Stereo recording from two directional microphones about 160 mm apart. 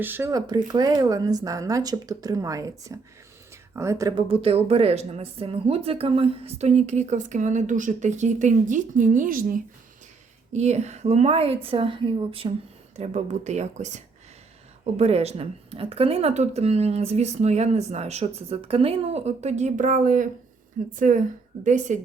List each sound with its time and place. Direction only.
0.0 s speech: 15° right (ahead or behind)
4.3 s speech: 35° right (ahead or behind); by 9.6 s 60° right (ahead or behind)
10.5 s speech: 45° right (ahead or behind)
13.0 s speech: 45° right (ahead or behind)